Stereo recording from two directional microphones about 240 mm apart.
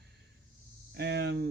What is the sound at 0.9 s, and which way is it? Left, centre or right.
Speech, right.